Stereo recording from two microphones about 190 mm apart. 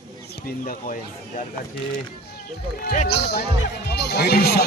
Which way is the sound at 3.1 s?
60° left (ahead or behind).